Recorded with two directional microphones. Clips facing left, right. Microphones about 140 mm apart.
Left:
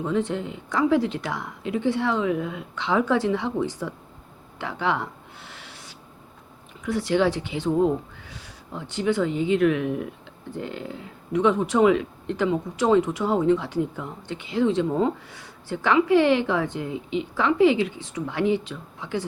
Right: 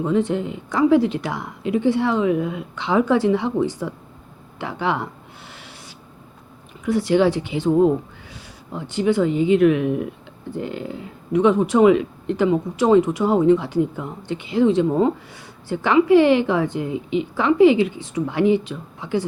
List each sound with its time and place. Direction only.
0.1 s speech: 10° right (ahead or behind)
4.8 s a sound: 15° right (ahead or behind)
6.8 s speech: 10° right (ahead or behind)